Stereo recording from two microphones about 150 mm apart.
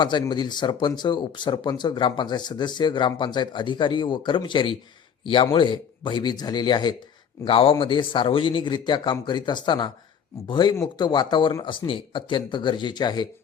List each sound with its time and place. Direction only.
0.0 s speech: 30° left (ahead or behind)